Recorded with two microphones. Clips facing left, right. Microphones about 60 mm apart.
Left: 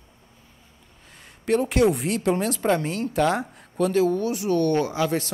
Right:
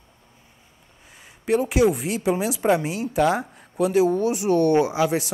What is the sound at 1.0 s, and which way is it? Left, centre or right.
A woman's voice, centre.